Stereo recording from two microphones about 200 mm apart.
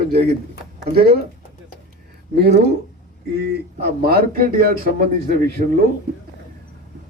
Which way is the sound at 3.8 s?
50° right (ahead or behind).